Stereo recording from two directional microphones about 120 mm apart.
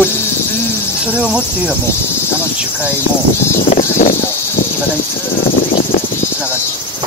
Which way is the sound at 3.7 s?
90° left.